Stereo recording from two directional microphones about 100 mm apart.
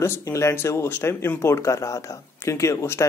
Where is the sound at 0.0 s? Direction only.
30° left (ahead or behind).